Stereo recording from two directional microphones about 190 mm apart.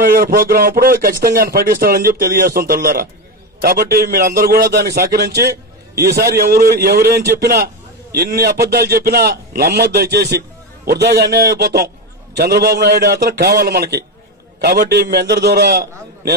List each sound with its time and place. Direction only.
0.0 s a man's voice: 50° right (ahead or behind)